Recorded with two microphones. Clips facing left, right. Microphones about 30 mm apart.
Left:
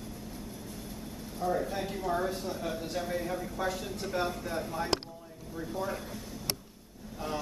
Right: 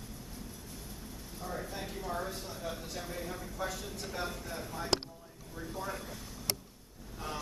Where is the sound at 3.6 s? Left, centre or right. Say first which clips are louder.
Left 2 dB; left.